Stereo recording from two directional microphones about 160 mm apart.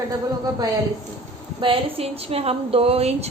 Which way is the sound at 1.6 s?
35° right (ahead or behind).